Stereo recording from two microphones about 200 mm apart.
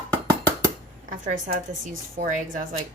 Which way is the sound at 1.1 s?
40° right (ahead or behind).